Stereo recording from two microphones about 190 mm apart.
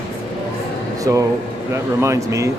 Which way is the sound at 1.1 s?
20° right (ahead or behind).